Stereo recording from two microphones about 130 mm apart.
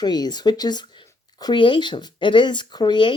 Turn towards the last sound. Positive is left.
turn(degrees=35)  # may be behind; listen again after turning